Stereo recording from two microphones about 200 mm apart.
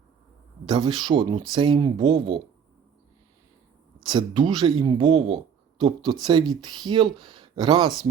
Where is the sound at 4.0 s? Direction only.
20° right (ahead or behind).